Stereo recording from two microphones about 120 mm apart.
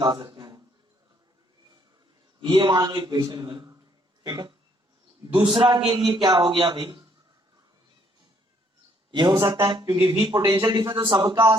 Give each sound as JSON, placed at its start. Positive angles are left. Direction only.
{"t": 0.0, "sound": "a sound", "side_deg": -40}
{"t": 2.4, "sound": "a man's voice", "side_deg": -40}
{"t": 9.1, "sound": "a man's voice", "side_deg": -40}